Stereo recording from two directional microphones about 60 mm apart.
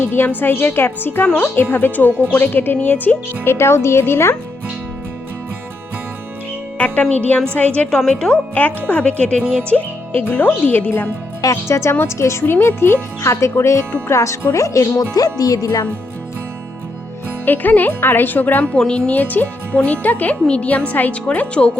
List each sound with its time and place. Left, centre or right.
0.0 s a woman's voice: left
3.5 s speech: left
6.7 s speech: left
7.9 s speech: centre
8.5 s speech: left
11.7 s speech: left
17.4 s a woman's voice: left
18.6 s speech: centre